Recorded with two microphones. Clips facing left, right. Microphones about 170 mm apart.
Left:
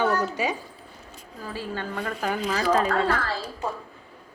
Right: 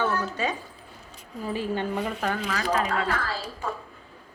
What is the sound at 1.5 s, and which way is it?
Speech, 20° right (ahead or behind).